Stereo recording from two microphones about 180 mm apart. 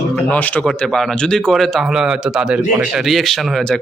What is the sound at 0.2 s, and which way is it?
Speech, 10° left (ahead or behind).